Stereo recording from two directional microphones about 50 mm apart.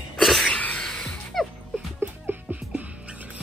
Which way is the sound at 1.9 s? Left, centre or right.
Right.